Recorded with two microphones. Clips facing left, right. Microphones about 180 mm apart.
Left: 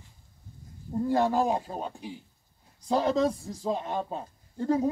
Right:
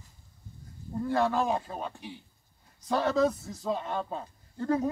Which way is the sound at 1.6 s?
35° left (ahead or behind).